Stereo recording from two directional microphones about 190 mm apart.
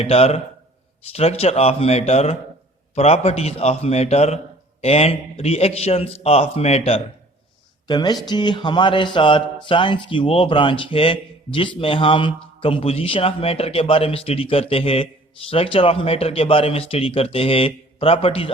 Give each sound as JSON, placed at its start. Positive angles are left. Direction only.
{"t": 0.0, "sound": "a man's voice", "side_deg": 30}